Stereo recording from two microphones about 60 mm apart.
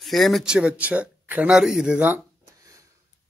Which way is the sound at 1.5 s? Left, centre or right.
Centre.